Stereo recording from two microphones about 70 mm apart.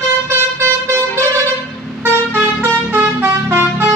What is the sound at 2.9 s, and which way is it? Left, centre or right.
Vehicle, right.